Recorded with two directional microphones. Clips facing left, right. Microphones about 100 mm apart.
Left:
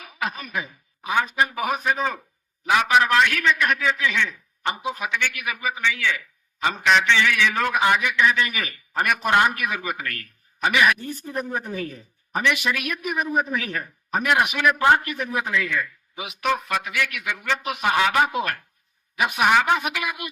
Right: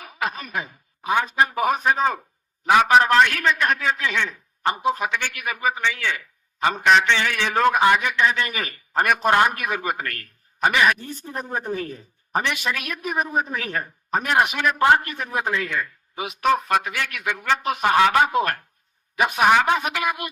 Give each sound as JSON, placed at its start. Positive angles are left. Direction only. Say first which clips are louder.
{"t": 0.0, "sound": "a man's voice", "louder": "right 1 dB", "side_deg": -35}